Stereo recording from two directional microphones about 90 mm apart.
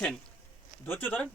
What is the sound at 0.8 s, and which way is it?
Speech, 20° left (ahead or behind).